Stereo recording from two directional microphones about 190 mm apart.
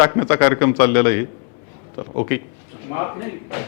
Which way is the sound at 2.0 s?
25° left (ahead or behind).